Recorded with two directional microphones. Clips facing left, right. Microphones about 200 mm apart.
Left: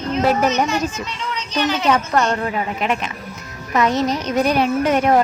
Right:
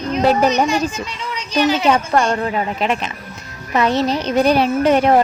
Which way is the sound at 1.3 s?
10° right (ahead or behind).